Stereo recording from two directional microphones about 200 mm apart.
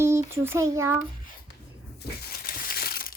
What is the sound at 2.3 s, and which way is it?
Crushing, 45° left (ahead or behind).